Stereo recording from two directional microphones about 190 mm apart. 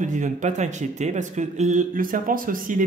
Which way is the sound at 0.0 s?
40° right (ahead or behind).